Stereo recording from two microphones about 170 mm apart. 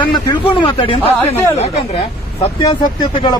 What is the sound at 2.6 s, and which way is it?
Speech, 25° left (ahead or behind).